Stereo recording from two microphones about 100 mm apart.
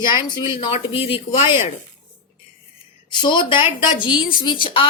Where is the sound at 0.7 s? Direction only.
65° left (ahead or behind).